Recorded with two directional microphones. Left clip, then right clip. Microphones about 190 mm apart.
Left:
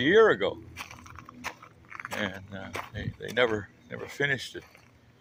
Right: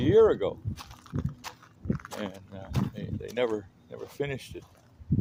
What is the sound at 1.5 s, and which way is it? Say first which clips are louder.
Biting: right 1 dB; 35° left (ahead or behind).